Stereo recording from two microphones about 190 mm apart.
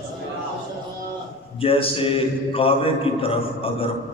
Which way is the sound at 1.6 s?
30° left (ahead or behind).